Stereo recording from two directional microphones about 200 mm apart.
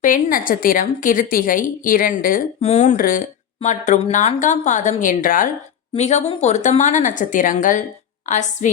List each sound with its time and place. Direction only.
0.0 s a woman's voice: 45° left (ahead or behind)